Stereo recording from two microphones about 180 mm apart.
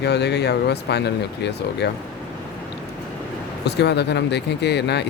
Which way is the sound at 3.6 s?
70° left (ahead or behind).